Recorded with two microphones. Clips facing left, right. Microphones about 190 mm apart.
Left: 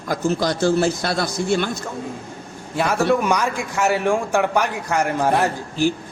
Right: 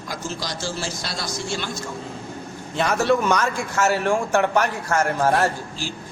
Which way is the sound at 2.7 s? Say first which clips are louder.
Left 1 dB; 5° left (ahead or behind).